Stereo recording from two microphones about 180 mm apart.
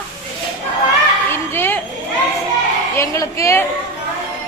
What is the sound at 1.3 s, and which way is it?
Speech, 15° left (ahead or behind).